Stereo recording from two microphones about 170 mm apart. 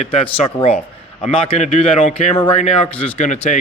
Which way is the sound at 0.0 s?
35° left (ahead or behind).